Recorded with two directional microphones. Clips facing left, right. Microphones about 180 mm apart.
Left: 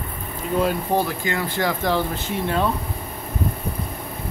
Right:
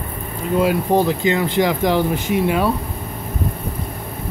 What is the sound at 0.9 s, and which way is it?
Speech, 20° right (ahead or behind).